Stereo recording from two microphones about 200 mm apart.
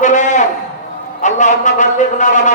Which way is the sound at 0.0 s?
35° left (ahead or behind).